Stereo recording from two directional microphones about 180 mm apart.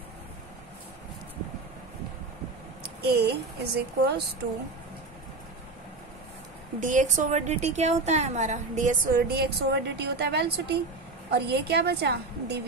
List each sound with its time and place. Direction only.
2.8 s speech: 60° right (ahead or behind)
6.8 s a woman's voice: 45° right (ahead or behind); by 12.6 s 65° right (ahead or behind)